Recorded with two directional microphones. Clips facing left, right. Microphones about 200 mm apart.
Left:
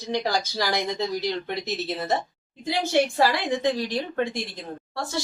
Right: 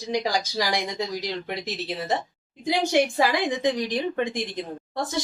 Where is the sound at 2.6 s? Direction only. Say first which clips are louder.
Right 1 dB; 15° right (ahead or behind).